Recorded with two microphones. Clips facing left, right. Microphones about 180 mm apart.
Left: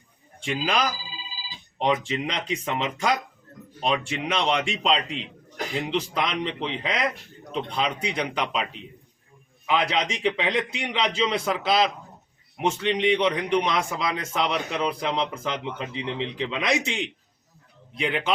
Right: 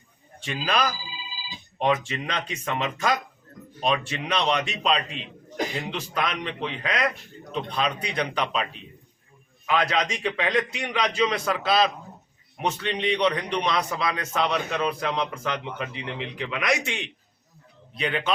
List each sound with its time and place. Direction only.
0.4 s speech: 15° left (ahead or behind)
1.8 s a man's voice: 20° left (ahead or behind)